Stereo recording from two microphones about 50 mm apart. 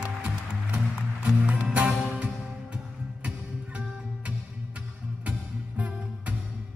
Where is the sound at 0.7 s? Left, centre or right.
Right.